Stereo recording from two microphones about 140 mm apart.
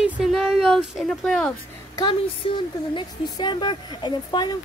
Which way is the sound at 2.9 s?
35° left (ahead or behind).